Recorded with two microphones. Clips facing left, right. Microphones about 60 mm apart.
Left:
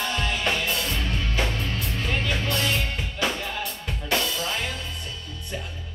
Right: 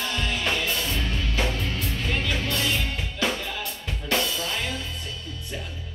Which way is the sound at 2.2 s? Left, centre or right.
Centre.